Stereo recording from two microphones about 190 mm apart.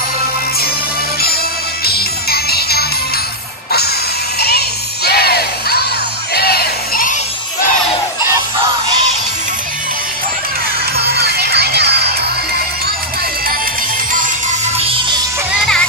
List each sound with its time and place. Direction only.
1.9 s music: 55° left (ahead or behind)
4.4 s music: 55° left (ahead or behind)
6.3 s crowd: 55° left (ahead or behind)
11.1 s music: 55° right (ahead or behind)
14.8 s music: 30° right (ahead or behind)